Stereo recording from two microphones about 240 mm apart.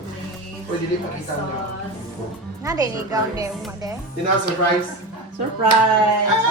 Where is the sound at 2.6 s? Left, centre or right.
Centre.